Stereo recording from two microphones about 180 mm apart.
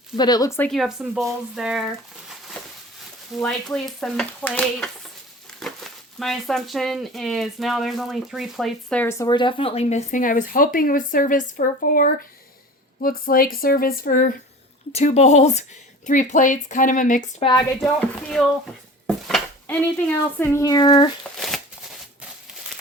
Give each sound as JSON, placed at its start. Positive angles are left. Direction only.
{"t": 0.2, "sound": "speech", "side_deg": 20}
{"t": 0.7, "sound": "stir", "side_deg": 0}
{"t": 3.3, "sound": "stir", "side_deg": 5}
{"t": 5.6, "sound": "a sound", "side_deg": 0}
{"t": 6.1, "sound": "speech", "side_deg": 0}
{"t": 14.9, "sound": "speech", "side_deg": 35}
{"t": 17.4, "sound": "speech", "side_deg": 25}
{"t": 17.7, "sound": "stir", "side_deg": 0}
{"t": 19.6, "sound": "speech", "side_deg": 10}
{"t": 21.3, "sound": "shuffling cards", "side_deg": 0}